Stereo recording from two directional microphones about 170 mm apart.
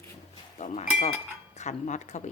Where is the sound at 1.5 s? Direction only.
45° left (ahead or behind).